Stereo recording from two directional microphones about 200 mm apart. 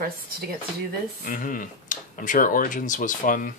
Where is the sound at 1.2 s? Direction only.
45° left (ahead or behind).